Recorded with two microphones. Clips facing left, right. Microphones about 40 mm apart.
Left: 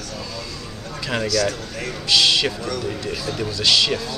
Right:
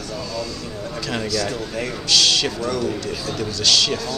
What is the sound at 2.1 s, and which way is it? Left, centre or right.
Speech, centre.